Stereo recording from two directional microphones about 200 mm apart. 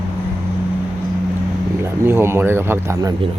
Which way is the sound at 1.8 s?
10° right (ahead or behind).